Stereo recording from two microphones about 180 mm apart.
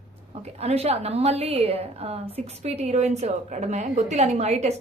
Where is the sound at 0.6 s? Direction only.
35° right (ahead or behind).